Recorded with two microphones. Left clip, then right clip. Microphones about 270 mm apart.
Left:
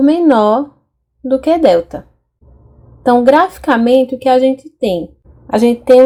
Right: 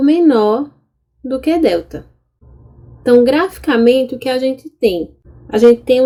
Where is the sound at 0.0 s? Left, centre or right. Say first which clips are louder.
Left 1 dB; centre.